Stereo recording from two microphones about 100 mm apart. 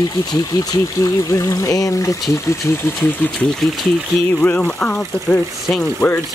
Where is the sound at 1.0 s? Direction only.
35° left (ahead or behind).